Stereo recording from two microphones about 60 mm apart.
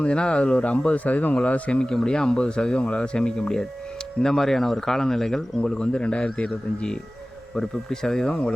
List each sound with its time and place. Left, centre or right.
0.0 s speech: centre